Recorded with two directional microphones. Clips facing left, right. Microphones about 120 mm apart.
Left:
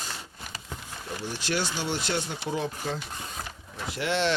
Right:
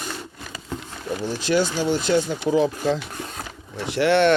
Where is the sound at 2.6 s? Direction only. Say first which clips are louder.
Right 10 dB; 90° right.